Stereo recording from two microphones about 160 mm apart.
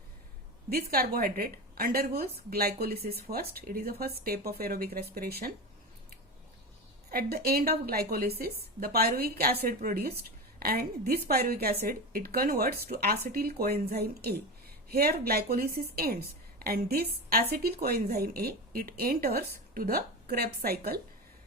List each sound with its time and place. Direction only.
0.7 s speech: 65° right (ahead or behind)
7.1 s speech: 70° right (ahead or behind); by 13.1 s 85° right
13.3 s speech: 70° right (ahead or behind)